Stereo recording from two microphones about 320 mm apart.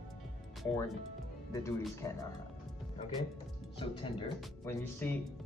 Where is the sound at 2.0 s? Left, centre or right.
Centre.